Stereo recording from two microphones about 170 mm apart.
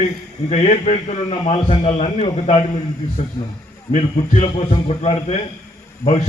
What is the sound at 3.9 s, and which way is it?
A man's voice, 40° left (ahead or behind).